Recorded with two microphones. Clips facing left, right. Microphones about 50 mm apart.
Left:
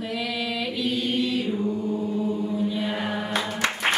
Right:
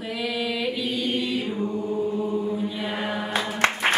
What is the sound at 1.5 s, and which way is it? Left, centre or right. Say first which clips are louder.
Chant: even; centre.